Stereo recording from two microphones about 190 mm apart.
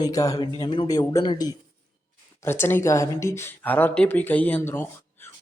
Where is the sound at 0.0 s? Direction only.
15° left (ahead or behind).